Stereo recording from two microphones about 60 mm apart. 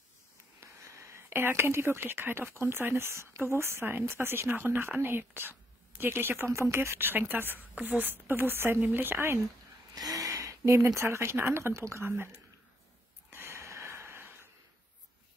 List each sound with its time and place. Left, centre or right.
0.6 s a woman's voice: right
9.9 s a sound: right
11.0 s speech: right
13.3 s snort: right